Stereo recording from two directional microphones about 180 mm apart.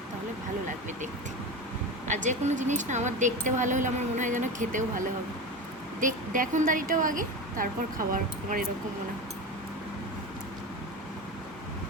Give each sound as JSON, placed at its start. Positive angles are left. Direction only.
{"t": 2.0, "sound": "a woman's voice", "side_deg": -40}
{"t": 6.0, "sound": "a woman's voice", "side_deg": -45}